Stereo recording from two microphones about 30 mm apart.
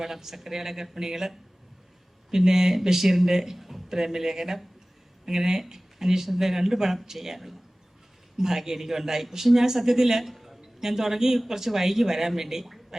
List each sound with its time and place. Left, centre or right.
0.0 s a woman's voice: centre
10.6 s a man's voice: centre
12.9 s gargling: centre